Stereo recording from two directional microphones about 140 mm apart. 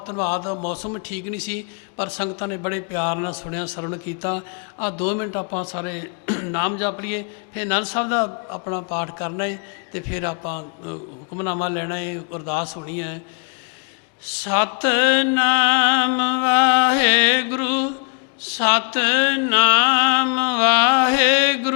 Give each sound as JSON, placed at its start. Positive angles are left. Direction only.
{"t": 0.0, "sound": "a man's voice", "side_deg": 25}
{"t": 2.0, "sound": "a man's voice", "side_deg": 25}
{"t": 5.9, "sound": "mantra", "side_deg": 15}
{"t": 7.9, "sound": "a man's voice", "side_deg": 20}
{"t": 11.7, "sound": "mantra", "side_deg": 10}
{"t": 12.3, "sound": "a man's voice", "side_deg": 25}
{"t": 14.4, "sound": "mantra", "side_deg": 20}